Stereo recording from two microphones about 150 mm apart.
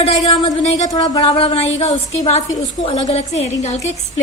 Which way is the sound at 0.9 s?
30° left (ahead or behind).